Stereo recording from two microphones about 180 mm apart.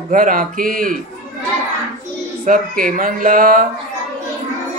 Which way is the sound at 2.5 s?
50° right (ahead or behind).